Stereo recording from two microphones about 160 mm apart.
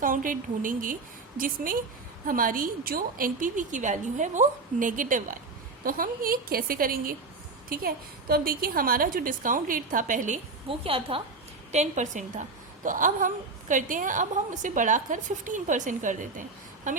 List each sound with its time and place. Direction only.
0.0 s a woman's voice: 60° right (ahead or behind)
10.7 s a woman's voice: 35° right (ahead or behind)
11.7 s a woman's voice: 45° right (ahead or behind)